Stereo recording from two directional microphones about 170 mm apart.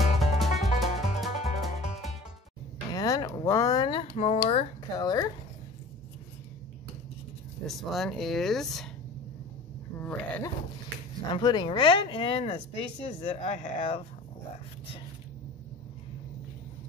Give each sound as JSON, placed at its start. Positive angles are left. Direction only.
{"t": 0.0, "sound": "music", "side_deg": 0}
{"t": 2.9, "sound": "a sound", "side_deg": 20}
{"t": 4.9, "sound": "speech", "side_deg": 20}
{"t": 7.6, "sound": "speech", "side_deg": 0}
{"t": 9.9, "sound": "speech", "side_deg": 10}
{"t": 11.3, "sound": "speech", "side_deg": 25}